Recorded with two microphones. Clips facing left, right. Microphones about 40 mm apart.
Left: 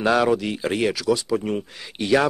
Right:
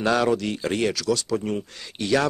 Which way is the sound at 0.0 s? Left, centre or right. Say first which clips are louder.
Left 2 dB; centre.